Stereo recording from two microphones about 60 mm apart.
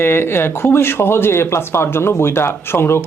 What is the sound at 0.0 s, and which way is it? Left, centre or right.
Speech, left.